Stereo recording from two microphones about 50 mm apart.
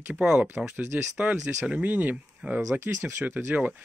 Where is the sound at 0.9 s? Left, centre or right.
Right.